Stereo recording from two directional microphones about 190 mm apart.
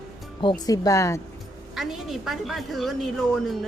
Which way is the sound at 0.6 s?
20° left (ahead or behind).